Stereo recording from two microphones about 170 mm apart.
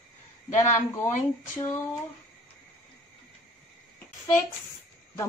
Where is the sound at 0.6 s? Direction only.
15° left (ahead or behind).